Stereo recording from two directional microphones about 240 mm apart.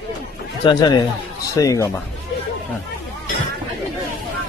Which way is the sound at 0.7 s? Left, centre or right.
Centre.